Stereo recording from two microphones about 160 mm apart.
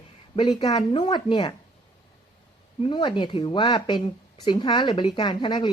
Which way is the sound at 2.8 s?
30° left (ahead or behind).